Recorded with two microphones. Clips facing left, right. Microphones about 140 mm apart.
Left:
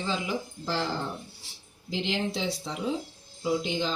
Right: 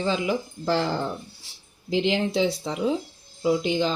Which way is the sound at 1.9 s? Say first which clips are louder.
Right 7 dB; 60° right (ahead or behind).